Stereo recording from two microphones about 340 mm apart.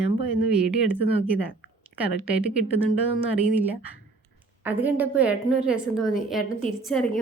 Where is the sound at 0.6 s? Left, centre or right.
Centre.